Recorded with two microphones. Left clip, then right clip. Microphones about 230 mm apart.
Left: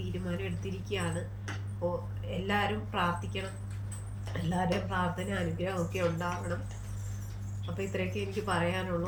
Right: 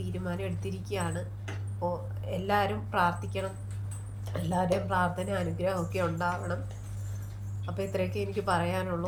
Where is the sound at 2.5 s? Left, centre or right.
Centre.